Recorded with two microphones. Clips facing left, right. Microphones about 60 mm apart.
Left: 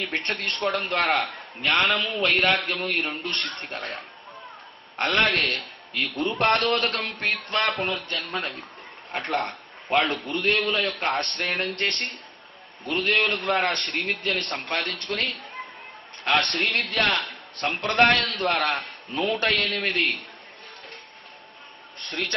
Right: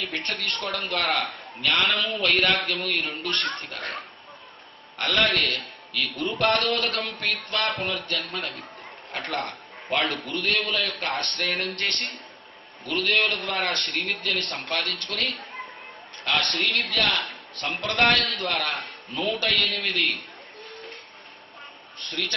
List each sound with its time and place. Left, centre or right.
0.0 s a man's voice: left
4.9 s a man's voice: left
22.1 s a man's voice: left